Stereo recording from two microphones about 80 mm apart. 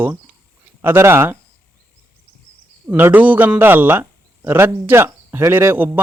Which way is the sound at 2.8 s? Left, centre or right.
Right.